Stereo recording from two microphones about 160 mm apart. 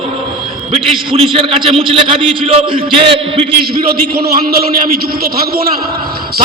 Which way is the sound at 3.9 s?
70° right (ahead or behind).